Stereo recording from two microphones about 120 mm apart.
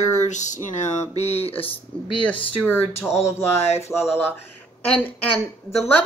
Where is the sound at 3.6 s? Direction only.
60° left (ahead or behind).